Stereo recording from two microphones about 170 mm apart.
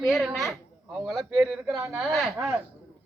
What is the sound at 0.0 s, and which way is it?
Speech, centre (ahead or behind).